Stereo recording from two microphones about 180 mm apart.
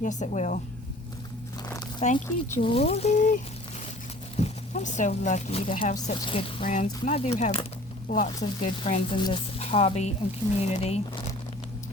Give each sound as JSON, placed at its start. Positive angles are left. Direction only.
{"t": 0.0, "sound": "a woman's voice", "side_deg": 40}
{"t": 2.0, "sound": "speech", "side_deg": 40}
{"t": 6.7, "sound": "speech", "side_deg": 45}